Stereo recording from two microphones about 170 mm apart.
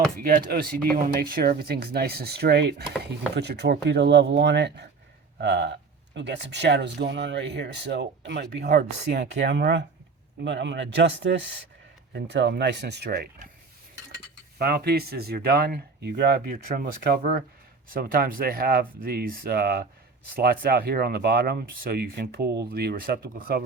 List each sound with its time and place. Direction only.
0.2 s speech: 60° right (ahead or behind); by 9.3 s 75° right (ahead or behind)
9.4 s speech: 90° right; by 13.5 s 65° right (ahead or behind)
14.6 s speech: 70° right (ahead or behind)